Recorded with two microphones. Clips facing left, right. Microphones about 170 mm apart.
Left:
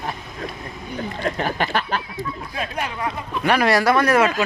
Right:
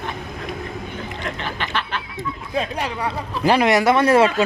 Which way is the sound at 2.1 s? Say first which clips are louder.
Right 4 dB; 30° right (ahead or behind).